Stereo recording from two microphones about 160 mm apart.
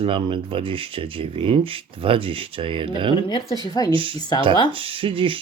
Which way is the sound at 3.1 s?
30° left (ahead or behind).